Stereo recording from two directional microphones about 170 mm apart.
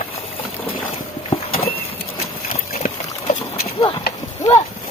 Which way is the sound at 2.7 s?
45° left (ahead or behind).